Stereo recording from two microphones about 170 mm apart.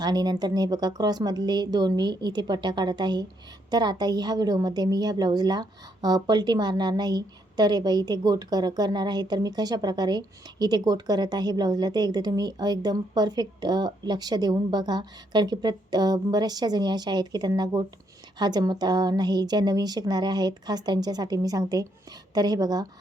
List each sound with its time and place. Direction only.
0.0 s a woman's voice: 25° right (ahead or behind)